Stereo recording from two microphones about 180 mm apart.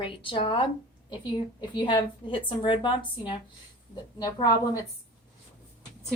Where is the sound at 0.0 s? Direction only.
30° left (ahead or behind).